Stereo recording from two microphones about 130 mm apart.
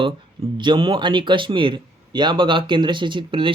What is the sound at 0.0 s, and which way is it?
Speech, 40° right (ahead or behind).